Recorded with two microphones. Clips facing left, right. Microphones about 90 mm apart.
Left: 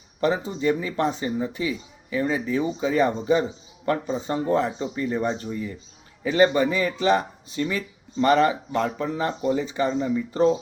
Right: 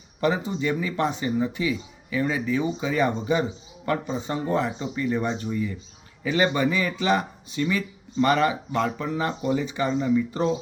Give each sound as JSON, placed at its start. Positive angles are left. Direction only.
{"t": 0.2, "sound": "speech", "side_deg": 35}